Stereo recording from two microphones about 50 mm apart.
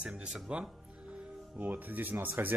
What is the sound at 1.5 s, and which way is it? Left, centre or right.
Speech, right.